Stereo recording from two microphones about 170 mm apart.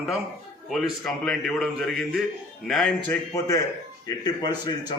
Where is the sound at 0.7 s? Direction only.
Centre (ahead or behind).